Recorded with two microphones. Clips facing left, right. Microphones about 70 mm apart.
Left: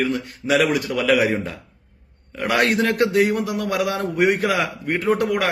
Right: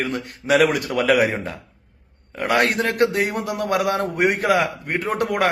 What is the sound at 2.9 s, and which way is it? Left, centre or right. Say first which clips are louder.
A man's voice: left 2 dB; right.